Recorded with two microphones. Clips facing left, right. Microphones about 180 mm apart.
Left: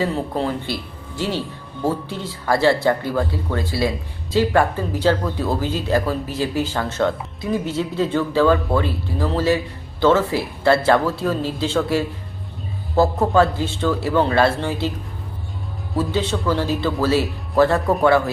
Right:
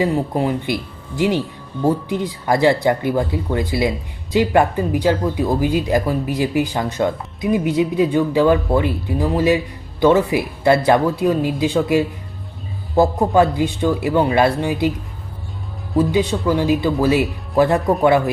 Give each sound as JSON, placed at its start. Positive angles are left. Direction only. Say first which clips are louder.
{"t": 0.0, "sound": "speech", "louder": "right 3 dB", "side_deg": -15}
{"t": 16.0, "sound": "speech", "louder": "right 5 dB", "side_deg": -15}